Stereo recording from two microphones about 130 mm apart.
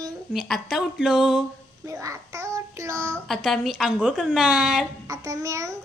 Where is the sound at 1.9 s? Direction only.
25° right (ahead or behind).